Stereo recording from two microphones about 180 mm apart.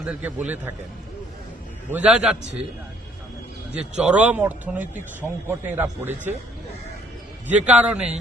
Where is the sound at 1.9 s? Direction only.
5° right (ahead or behind).